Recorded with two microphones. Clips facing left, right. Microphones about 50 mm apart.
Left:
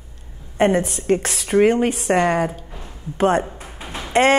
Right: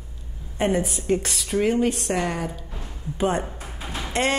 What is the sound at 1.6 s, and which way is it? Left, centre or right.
Speech, left.